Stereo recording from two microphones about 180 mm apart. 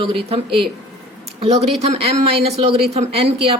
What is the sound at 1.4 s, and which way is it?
Speech, 35° right (ahead or behind).